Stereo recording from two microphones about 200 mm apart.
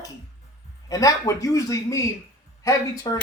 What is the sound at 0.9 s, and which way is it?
Speech, 15° left (ahead or behind).